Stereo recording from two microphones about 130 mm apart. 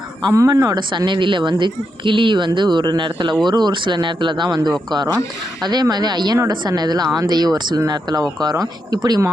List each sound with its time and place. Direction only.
0.3 s speech: 25° right (ahead or behind)